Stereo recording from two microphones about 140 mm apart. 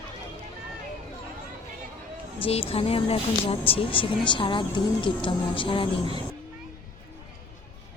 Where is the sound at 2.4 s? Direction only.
45° left (ahead or behind).